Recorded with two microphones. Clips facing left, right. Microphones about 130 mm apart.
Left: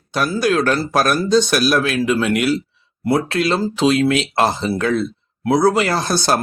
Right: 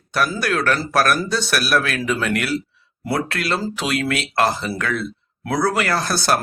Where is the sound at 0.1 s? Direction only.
20° left (ahead or behind).